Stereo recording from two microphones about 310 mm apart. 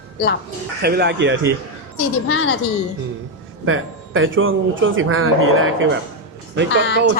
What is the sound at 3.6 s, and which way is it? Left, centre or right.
Speech, right.